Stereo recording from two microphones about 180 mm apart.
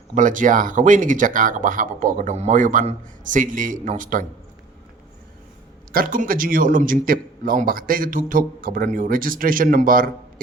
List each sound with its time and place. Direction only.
0.1 s a man's voice: 45° right (ahead or behind)
5.9 s a man's voice: 50° right (ahead or behind)